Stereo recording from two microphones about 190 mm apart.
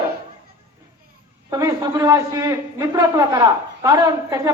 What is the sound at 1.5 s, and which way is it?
A man's voice, 20° right (ahead or behind).